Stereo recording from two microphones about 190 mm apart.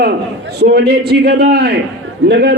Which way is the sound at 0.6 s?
60° right (ahead or behind).